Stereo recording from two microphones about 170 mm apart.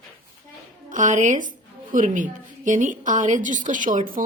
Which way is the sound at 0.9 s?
50° right (ahead or behind).